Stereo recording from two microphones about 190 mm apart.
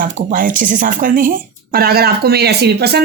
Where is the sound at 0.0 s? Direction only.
45° right (ahead or behind).